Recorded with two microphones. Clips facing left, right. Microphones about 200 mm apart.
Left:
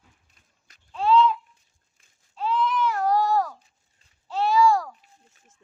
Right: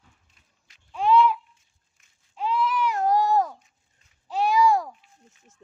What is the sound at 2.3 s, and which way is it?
Baby cry, 15° right (ahead or behind).